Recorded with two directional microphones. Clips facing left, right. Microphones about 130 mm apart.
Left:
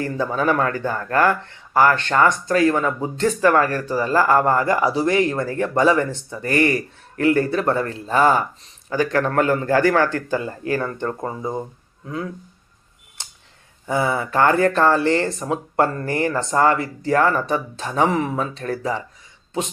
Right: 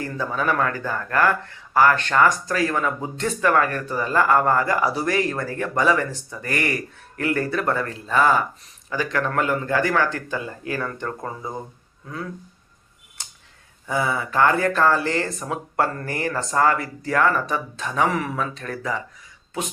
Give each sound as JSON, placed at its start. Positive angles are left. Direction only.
{"t": 0.0, "sound": "speech", "side_deg": 30}
{"t": 13.8, "sound": "speech", "side_deg": 25}